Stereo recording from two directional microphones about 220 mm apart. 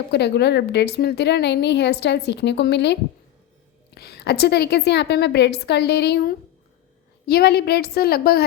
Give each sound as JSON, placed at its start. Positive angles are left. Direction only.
{"t": 0.1, "sound": "a woman's voice", "side_deg": 50}